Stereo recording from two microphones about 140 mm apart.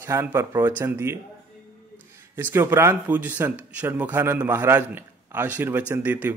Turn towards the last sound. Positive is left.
turn(degrees=-15)  # may be behind; listen again after turning